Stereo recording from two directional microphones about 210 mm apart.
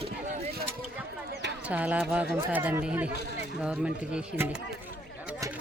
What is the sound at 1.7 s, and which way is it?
Speech, 5° right (ahead or behind).